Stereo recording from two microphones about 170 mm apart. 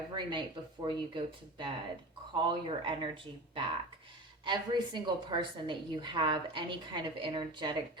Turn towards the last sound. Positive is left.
turn(degrees=-25)  # may be behind; listen again after turning